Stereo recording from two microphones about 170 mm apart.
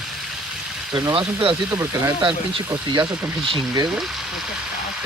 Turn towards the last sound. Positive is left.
turn(degrees=-25)  # may be behind; listen again after turning